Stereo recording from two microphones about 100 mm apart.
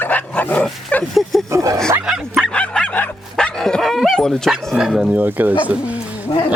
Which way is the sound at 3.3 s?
5° left (ahead or behind).